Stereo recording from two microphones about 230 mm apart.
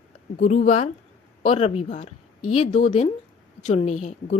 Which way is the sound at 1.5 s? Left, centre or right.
Left.